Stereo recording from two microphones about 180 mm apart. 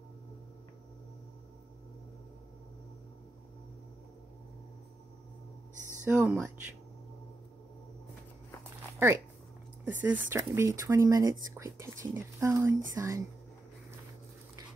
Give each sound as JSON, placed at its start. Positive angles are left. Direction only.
{"t": 6.0, "sound": "speech", "side_deg": -10}
{"t": 9.9, "sound": "speech", "side_deg": -10}